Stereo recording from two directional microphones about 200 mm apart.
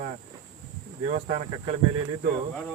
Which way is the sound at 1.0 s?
35° right (ahead or behind).